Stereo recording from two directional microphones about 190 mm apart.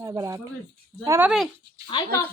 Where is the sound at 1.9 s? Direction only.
25° left (ahead or behind).